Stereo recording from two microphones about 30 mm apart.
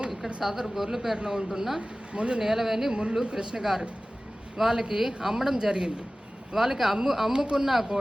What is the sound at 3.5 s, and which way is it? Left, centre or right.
Speech, right.